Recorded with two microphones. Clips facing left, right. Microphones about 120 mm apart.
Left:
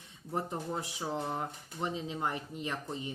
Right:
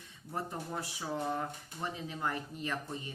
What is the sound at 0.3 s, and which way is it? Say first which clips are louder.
Speech: left 3 dB; 20° left (ahead or behind).